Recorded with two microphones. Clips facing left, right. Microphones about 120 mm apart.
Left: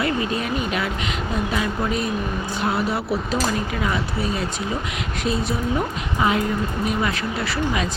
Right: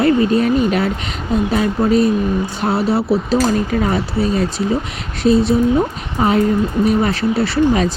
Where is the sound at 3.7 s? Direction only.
40° right (ahead or behind).